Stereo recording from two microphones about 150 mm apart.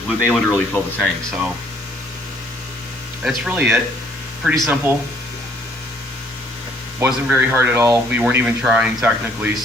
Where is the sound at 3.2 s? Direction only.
5° right (ahead or behind).